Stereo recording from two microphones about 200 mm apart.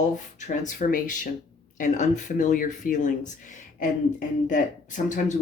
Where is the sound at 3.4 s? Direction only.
40° left (ahead or behind).